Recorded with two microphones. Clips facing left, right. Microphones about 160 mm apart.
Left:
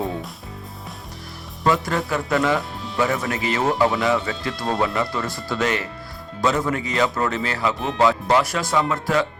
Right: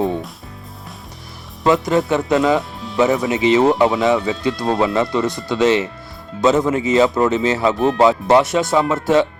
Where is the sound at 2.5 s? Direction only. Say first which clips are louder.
Right 5 dB; centre (ahead or behind).